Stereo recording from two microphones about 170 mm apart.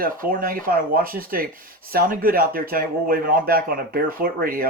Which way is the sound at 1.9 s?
60° right (ahead or behind).